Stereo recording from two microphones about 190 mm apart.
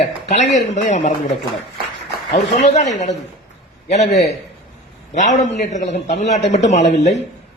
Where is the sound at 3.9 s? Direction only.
35° left (ahead or behind).